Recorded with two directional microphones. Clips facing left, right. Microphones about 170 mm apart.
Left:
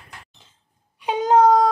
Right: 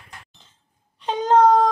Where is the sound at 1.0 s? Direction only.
10° left (ahead or behind).